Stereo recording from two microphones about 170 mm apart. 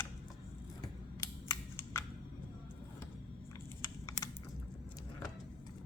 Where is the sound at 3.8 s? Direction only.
20° left (ahead or behind).